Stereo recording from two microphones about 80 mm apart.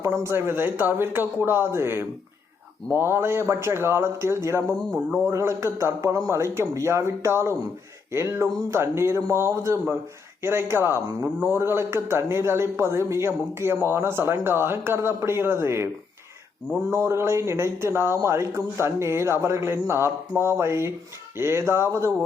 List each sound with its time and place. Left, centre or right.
0.0 s a man's voice: right
16.9 s a man's voice: right